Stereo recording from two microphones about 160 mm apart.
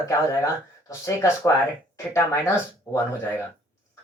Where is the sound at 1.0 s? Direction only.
20° left (ahead or behind).